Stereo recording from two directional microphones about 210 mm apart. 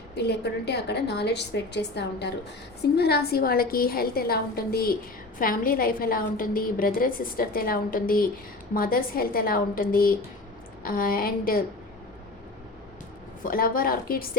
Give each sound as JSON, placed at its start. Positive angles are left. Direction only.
{"t": 0.2, "sound": "a woman's voice", "side_deg": 55}
{"t": 13.4, "sound": "a woman's voice", "side_deg": 45}